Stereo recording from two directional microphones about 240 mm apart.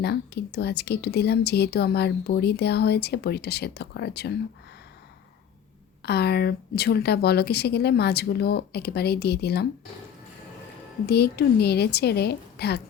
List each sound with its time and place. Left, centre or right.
0.0 s speech: left
6.1 s speech: left
11.0 s speech: left